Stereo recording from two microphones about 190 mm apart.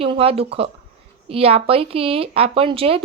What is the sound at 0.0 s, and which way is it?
A woman's voice, 30° right (ahead or behind).